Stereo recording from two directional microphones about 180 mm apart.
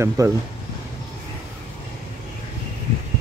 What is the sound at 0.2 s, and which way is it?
Speech, 20° right (ahead or behind).